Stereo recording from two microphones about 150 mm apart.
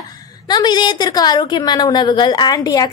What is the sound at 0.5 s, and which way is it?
A woman's voice, 30° left (ahead or behind).